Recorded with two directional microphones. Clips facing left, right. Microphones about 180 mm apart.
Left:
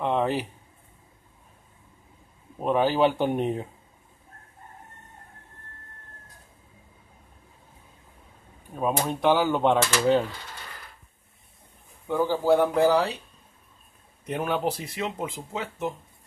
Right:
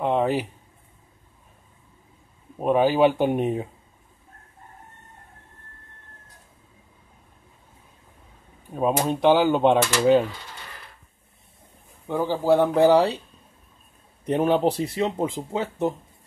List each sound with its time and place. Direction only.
0.0 s a sound: 10° right (ahead or behind)
2.6 s speech: 10° right (ahead or behind)
8.7 s speech: 20° right (ahead or behind)
12.1 s speech: 20° right (ahead or behind)
14.2 s speech: 30° right (ahead or behind)